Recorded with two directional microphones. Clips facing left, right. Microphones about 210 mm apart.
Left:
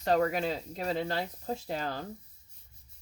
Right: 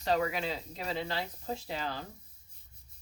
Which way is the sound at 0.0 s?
50° left (ahead or behind).